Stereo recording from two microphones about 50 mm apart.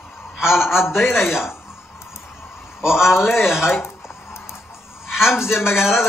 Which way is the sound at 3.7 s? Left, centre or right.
Left.